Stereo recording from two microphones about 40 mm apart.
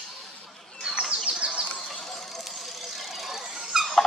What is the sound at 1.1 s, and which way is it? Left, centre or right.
Bird, right.